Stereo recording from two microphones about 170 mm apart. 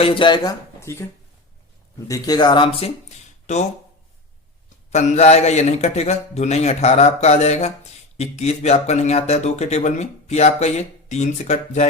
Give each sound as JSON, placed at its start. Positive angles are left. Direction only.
{"t": 0.0, "sound": "speech", "side_deg": 30}
{"t": 0.8, "sound": "speech", "side_deg": 15}
{"t": 2.0, "sound": "speech", "side_deg": 20}
{"t": 3.4, "sound": "speech", "side_deg": 45}
{"t": 4.9, "sound": "speech", "side_deg": 45}